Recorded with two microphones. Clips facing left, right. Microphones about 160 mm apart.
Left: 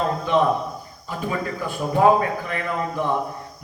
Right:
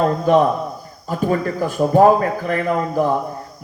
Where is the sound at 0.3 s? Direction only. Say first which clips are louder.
Right 4 dB; 40° right (ahead or behind).